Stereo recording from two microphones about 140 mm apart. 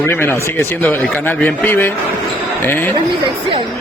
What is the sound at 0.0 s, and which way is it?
A man's voice, 15° left (ahead or behind).